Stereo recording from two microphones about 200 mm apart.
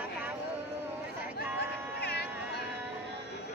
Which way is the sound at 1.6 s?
55° left (ahead or behind).